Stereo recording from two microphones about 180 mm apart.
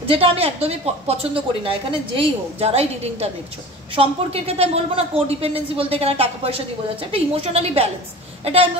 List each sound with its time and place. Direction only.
0.1 s speech: 30° right (ahead or behind)